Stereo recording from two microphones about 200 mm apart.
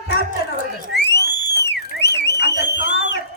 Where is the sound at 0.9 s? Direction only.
55° left (ahead or behind).